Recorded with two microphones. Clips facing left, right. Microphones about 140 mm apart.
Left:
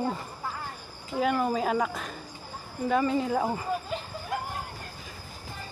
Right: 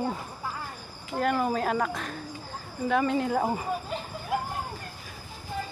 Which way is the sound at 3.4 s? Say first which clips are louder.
Right 1 dB; 15° right (ahead or behind).